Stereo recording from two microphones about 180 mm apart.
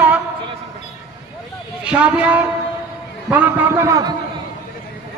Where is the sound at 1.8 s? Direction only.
5° right (ahead or behind).